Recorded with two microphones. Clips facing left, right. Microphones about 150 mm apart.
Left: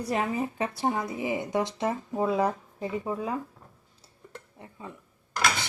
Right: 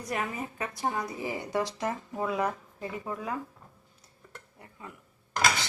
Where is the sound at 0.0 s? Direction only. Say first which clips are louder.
Left 5 dB; 30° left (ahead or behind).